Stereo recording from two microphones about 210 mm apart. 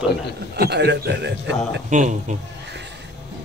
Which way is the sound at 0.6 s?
50° right (ahead or behind).